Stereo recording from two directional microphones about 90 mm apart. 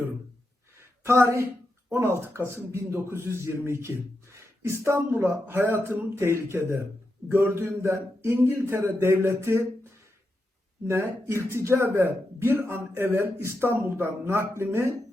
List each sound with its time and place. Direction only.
0.8 s a sound: 30° right (ahead or behind)
2.0 s a man's voice: 30° right (ahead or behind)
10.8 s a man's voice: 30° right (ahead or behind)